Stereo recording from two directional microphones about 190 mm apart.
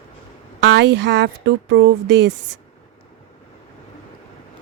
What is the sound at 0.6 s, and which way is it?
Speech, 70° right (ahead or behind).